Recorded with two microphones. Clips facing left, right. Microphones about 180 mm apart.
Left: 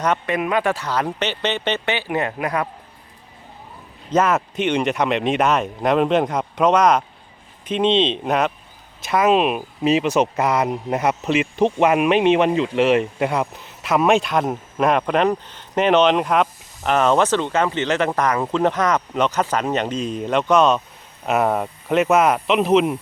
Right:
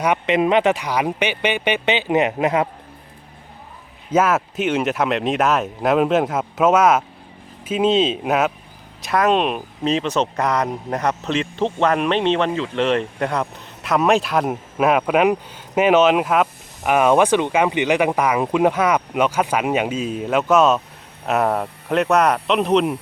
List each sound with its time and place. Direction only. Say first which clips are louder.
0.0 s speech: right 3 dB; 15° right (ahead or behind)
4.1 s speech: right 1 dB; 5° right (ahead or behind)